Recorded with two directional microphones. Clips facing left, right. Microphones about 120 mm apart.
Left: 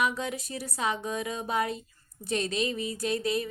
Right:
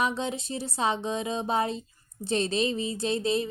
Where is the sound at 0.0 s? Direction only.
25° right (ahead or behind).